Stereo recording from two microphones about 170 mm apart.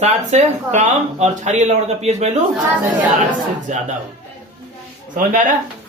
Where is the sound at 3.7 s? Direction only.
45° right (ahead or behind).